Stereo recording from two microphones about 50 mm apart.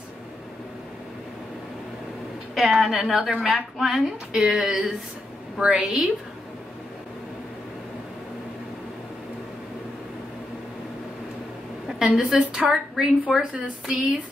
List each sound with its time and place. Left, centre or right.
2.5 s speech: centre
12.0 s speech: centre